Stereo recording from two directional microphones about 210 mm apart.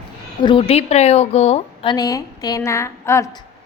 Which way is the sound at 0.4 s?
25° left (ahead or behind).